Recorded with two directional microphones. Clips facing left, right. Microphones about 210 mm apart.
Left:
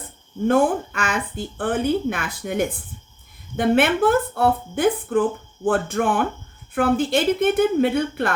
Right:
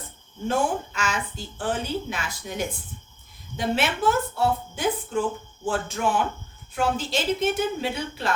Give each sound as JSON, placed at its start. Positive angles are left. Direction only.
{"t": 0.4, "sound": "a woman's voice", "side_deg": 55}